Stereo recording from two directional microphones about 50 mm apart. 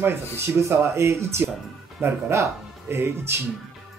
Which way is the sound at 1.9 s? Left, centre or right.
Right.